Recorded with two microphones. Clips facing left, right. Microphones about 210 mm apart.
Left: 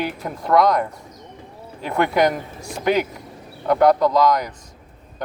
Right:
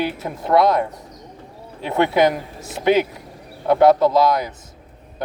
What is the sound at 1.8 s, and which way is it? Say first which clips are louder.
Speech: right 2 dB; 25° right (ahead or behind).